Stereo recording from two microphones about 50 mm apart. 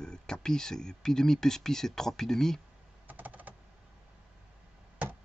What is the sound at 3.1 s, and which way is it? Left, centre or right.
Typing, right.